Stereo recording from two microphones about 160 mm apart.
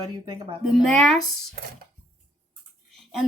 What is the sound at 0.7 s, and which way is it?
Speech, centre (ahead or behind).